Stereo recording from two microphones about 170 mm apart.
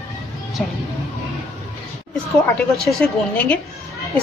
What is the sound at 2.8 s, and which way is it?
Speech, 5° left (ahead or behind).